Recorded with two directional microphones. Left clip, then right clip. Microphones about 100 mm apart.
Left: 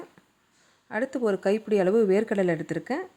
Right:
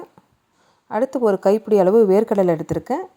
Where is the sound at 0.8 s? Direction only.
40° right (ahead or behind).